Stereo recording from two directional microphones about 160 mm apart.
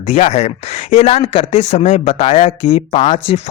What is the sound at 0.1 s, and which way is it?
Speech, 40° left (ahead or behind).